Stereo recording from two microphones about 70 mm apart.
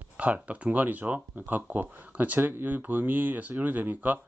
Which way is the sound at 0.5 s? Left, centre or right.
Right.